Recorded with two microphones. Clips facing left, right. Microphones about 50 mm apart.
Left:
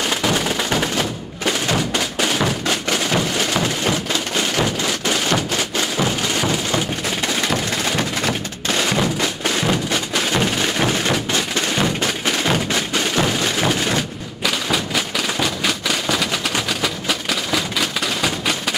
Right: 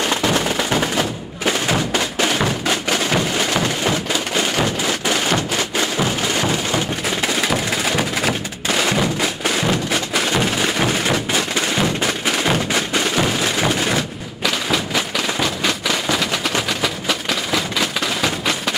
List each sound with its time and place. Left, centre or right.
0.1 s music: centre